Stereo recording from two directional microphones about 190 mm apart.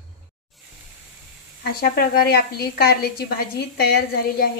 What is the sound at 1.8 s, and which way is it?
A woman's voice, 50° left (ahead or behind).